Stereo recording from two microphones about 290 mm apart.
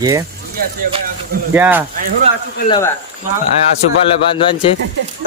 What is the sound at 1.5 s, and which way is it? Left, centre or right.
Speech, centre.